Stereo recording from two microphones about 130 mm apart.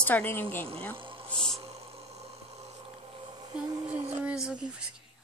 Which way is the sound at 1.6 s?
50° right (ahead or behind).